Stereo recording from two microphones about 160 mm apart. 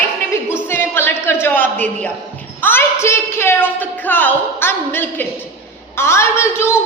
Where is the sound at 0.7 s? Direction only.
15° left (ahead or behind).